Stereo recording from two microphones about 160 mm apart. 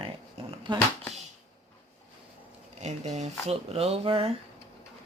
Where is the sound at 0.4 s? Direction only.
40° right (ahead or behind).